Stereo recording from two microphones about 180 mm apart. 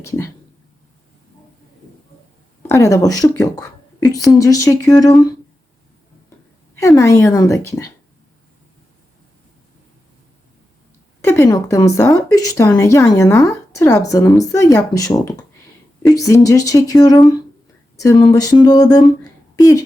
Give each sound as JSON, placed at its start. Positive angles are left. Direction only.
{"t": 0.0, "sound": "a woman's voice", "side_deg": 15}
{"t": 2.6, "sound": "speech", "side_deg": 15}
{"t": 6.7, "sound": "a woman's voice", "side_deg": 15}
{"t": 11.2, "sound": "a woman's voice", "side_deg": 15}